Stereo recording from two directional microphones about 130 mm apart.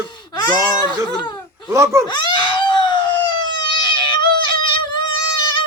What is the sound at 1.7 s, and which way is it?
Speech, 25° right (ahead or behind).